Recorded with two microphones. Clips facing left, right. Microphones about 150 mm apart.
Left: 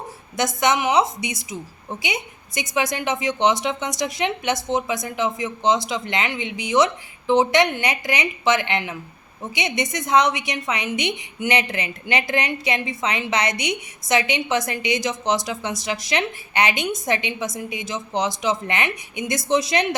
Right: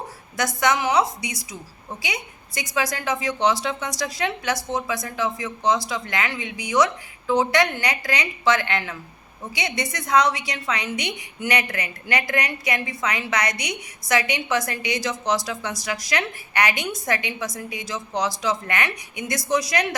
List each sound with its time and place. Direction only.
0.3 s a woman's voice: 20° left (ahead or behind)